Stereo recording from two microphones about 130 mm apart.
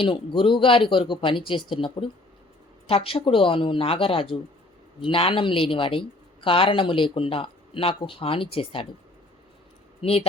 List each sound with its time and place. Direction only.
0.0 s speech: 40° left (ahead or behind)
10.0 s speech: 50° left (ahead or behind)